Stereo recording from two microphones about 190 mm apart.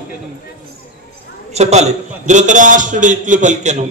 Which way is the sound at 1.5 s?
35° right (ahead or behind).